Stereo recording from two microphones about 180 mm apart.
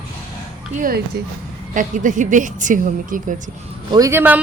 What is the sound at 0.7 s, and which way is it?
A woman's voice, 50° right (ahead or behind).